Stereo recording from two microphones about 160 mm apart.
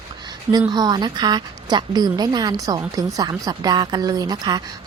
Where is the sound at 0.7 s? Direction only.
25° right (ahead or behind).